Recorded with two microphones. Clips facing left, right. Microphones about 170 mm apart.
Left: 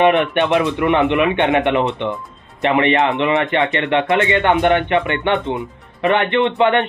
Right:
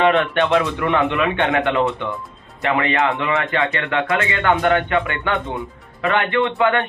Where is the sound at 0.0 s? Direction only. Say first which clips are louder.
Left 2 dB; 20° left (ahead or behind).